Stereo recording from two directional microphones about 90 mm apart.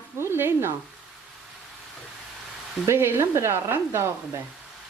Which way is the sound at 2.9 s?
30° right (ahead or behind).